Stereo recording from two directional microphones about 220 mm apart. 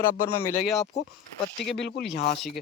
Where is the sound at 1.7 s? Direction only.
50° left (ahead or behind).